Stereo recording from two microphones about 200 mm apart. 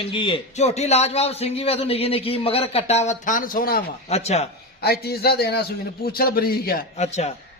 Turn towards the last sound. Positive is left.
turn(degrees=35)  # may be behind; listen again after turning